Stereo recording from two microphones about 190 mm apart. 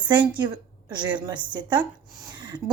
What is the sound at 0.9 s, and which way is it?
Speech, 25° right (ahead or behind).